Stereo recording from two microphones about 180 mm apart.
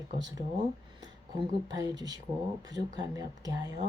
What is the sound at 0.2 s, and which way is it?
Speech, 20° right (ahead or behind).